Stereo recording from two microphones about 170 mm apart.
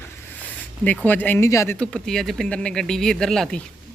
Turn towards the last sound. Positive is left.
turn(degrees=0)  # may be behind; listen again after turning